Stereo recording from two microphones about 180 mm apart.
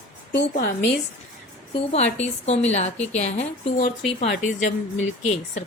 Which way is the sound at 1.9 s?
35° left (ahead or behind).